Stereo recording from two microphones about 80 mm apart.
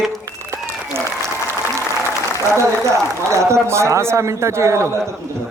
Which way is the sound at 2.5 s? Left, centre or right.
Right.